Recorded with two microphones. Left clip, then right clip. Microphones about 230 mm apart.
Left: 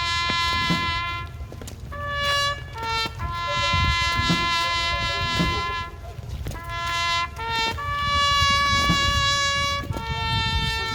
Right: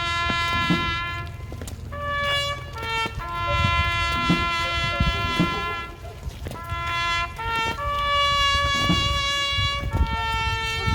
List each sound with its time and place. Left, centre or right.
0.0 s music: left